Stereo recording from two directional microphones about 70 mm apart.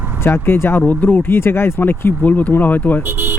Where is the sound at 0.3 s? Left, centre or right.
Left.